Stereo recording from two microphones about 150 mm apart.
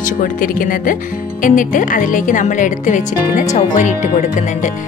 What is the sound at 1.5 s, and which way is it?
Speech, 60° left (ahead or behind).